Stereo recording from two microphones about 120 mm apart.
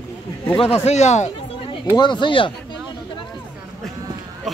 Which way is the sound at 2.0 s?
40° left (ahead or behind).